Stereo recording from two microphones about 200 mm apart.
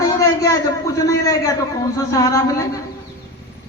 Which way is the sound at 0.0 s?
15° left (ahead or behind).